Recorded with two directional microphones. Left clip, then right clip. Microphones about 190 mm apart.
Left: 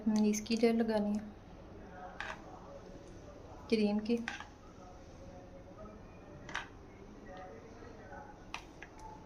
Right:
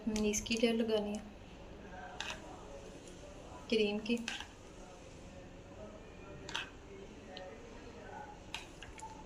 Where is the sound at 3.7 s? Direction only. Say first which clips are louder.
Even; 50° left (ahead or behind).